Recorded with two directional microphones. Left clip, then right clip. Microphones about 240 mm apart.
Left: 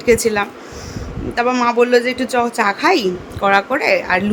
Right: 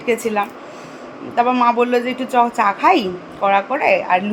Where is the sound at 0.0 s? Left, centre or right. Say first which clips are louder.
Left 4 dB; centre.